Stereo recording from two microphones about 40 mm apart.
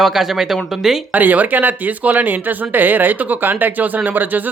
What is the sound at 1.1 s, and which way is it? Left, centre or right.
Speech, right.